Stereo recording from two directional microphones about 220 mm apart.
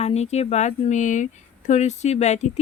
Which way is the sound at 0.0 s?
30° left (ahead or behind).